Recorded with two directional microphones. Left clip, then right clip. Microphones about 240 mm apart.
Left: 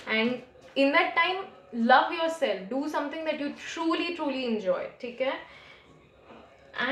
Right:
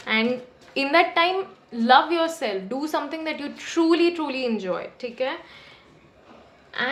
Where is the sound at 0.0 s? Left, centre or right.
Right.